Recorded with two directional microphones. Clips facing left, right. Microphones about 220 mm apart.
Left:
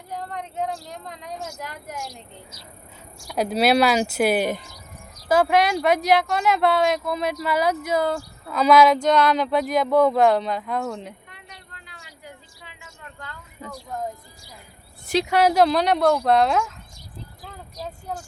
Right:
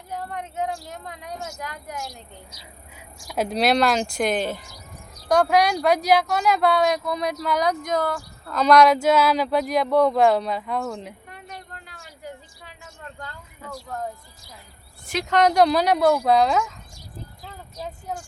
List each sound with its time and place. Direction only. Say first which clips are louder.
0.1 s speech: even; 5° right (ahead or behind)
1.5 s speech: even; 5° left (ahead or behind)
11.3 s vehicle: right 7 dB; 50° right (ahead or behind)
13.6 s music: even; 15° left (ahead or behind)
15.3 s speech: right 1 dB; 5° left (ahead or behind)